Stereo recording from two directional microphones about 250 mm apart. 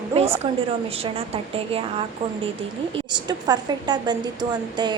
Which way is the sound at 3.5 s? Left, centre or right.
Centre.